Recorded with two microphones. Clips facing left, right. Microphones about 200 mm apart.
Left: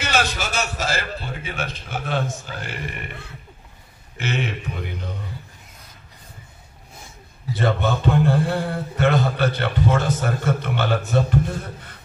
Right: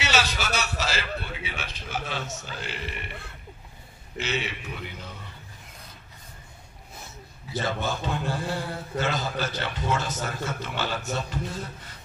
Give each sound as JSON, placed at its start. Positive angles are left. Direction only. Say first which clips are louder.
{"t": 0.0, "sound": "a man's voice", "louder": "left 3 dB", "side_deg": 50}
{"t": 4.2, "sound": "a man's voice", "louder": "left 4 dB", "side_deg": 50}
{"t": 7.5, "sound": "a man's voice", "louder": "left 7 dB", "side_deg": 60}